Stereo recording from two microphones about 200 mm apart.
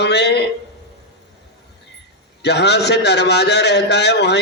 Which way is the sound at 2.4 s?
55° left (ahead or behind).